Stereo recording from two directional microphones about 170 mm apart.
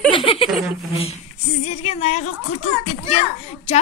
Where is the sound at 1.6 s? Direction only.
40° left (ahead or behind).